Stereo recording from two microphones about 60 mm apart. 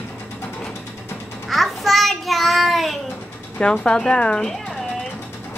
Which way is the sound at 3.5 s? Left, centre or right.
Centre.